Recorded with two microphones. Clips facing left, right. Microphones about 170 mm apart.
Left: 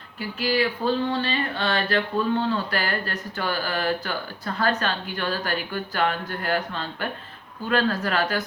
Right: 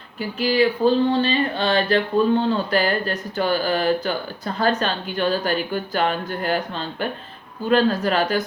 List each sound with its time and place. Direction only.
0.2 s speech: 20° right (ahead or behind)